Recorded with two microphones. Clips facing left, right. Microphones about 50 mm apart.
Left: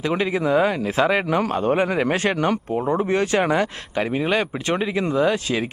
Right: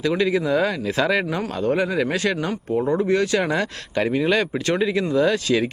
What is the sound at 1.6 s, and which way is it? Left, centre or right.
Speech, left.